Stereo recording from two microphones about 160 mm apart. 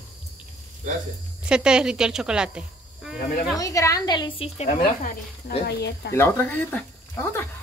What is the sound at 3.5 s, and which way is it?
Speech, 20° left (ahead or behind).